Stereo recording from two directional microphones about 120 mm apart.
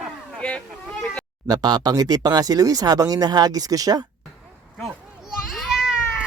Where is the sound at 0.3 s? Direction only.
10° left (ahead or behind).